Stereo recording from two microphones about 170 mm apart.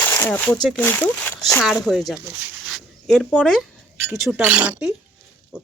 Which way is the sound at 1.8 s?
Centre (ahead or behind).